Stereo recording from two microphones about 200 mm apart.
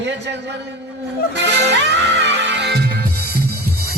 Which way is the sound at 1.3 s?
60° right (ahead or behind).